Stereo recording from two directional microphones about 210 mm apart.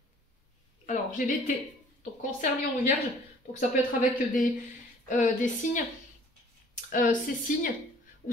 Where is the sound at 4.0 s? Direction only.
40° left (ahead or behind).